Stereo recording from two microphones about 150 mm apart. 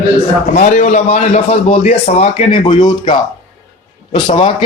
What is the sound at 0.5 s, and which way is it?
A man's voice, 55° left (ahead or behind).